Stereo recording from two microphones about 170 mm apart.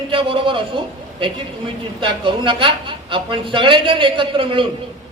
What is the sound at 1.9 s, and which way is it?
A man's voice, 30° right (ahead or behind).